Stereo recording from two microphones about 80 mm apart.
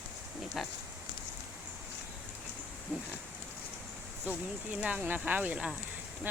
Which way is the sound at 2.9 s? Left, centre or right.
Centre.